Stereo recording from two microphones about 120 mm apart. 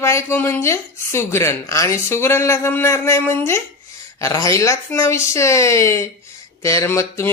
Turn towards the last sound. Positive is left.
turn(degrees=20)  # may be behind; listen again after turning